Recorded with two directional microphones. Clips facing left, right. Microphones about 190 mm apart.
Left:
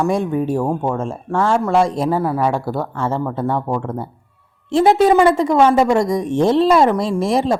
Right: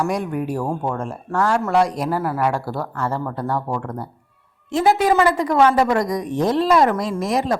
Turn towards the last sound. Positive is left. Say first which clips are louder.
# left 4 dB
turn(degrees=30)  # may be behind; listen again after turning